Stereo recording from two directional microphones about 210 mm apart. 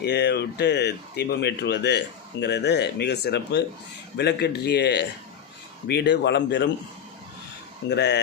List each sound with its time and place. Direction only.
0.0 s speech: 55° left (ahead or behind)
7.9 s speech: 55° left (ahead or behind)